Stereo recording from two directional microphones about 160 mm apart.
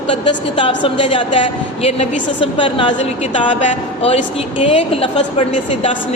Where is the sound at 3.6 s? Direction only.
45° left (ahead or behind).